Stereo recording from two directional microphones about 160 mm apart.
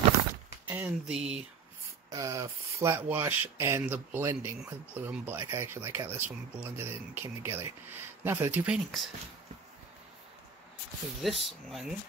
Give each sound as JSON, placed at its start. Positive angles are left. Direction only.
{"t": 0.7, "sound": "speech", "side_deg": -10}
{"t": 2.0, "sound": "speech", "side_deg": -20}
{"t": 11.2, "sound": "speech", "side_deg": 0}